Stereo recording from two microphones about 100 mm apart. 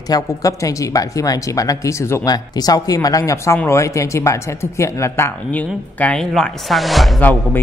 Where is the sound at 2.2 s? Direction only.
40° left (ahead or behind).